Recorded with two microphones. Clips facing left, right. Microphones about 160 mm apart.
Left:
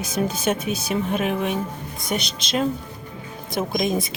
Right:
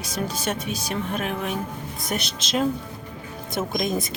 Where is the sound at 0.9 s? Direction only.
Centre (ahead or behind).